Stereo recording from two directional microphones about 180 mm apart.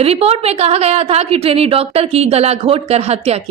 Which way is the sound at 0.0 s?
35° right (ahead or behind).